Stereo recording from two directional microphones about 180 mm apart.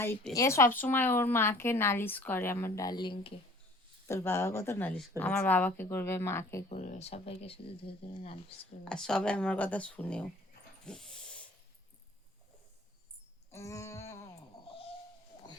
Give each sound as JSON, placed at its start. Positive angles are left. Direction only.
{"t": 0.3, "sound": "speech", "side_deg": 15}
{"t": 4.1, "sound": "speech", "side_deg": 15}
{"t": 6.7, "sound": "speech", "side_deg": 40}
{"t": 8.8, "sound": "speech", "side_deg": 5}
{"t": 10.8, "sound": "dog", "side_deg": 5}
{"t": 13.5, "sound": "a sound", "side_deg": 15}
{"t": 14.7, "sound": "owl", "side_deg": 30}